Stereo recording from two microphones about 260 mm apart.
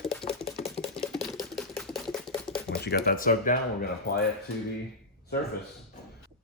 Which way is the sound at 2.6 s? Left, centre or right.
Left.